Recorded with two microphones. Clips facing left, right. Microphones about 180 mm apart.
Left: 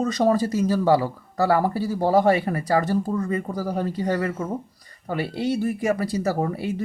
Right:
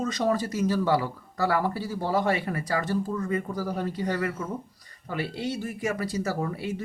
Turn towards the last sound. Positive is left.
turn(degrees=35)  # may be behind; listen again after turning